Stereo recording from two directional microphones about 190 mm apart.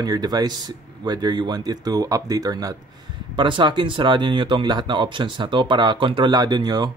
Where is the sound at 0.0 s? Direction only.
20° right (ahead or behind).